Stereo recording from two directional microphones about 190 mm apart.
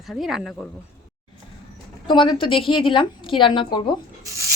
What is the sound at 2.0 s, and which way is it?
A woman's voice, 25° left (ahead or behind).